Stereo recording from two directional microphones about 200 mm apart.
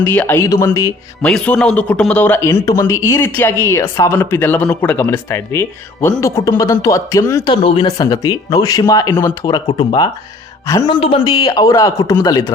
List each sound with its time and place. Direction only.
0.0 s a man's voice: 10° left (ahead or behind)
1.2 s a man's voice: 5° left (ahead or behind)